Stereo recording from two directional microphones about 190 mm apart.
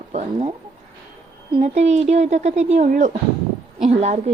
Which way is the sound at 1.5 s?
35° right (ahead or behind).